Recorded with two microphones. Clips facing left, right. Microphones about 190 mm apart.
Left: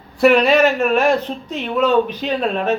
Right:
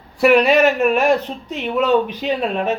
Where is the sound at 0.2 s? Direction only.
10° right (ahead or behind).